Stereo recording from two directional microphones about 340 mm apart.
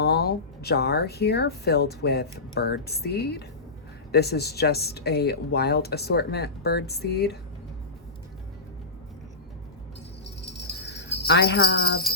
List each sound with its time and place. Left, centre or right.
0.0 s speech: left
11.3 s jingle bell: left